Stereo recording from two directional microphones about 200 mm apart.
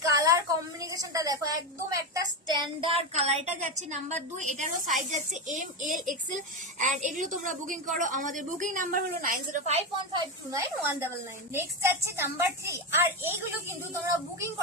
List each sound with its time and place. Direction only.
0.1 s a woman's voice: 15° right (ahead or behind); by 9.8 s 35° right (ahead or behind)
10.2 s a woman's voice: 15° right (ahead or behind)